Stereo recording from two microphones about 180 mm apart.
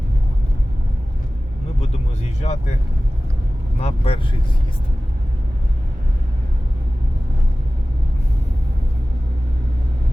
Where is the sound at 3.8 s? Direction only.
35° left (ahead or behind).